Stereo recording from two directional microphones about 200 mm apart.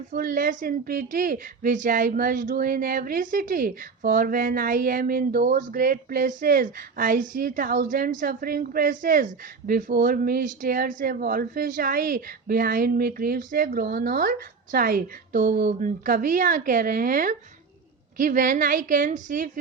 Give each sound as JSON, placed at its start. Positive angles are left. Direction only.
{"t": 0.1, "sound": "a woman's voice", "side_deg": -45}